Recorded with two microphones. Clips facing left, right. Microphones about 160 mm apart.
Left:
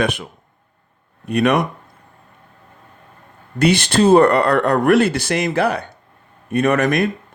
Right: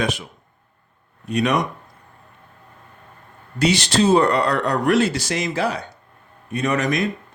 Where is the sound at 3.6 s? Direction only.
55° left (ahead or behind).